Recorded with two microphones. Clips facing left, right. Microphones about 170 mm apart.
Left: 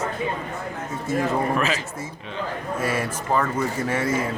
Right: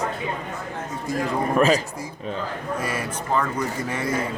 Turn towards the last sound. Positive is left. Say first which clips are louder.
# left 2 dB
turn(degrees=5)  # may be behind; listen again after turning